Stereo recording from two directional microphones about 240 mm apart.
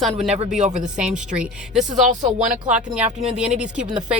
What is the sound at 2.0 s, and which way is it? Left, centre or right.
Speech, right.